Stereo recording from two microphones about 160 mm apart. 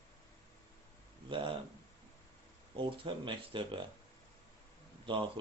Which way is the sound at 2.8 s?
30° right (ahead or behind).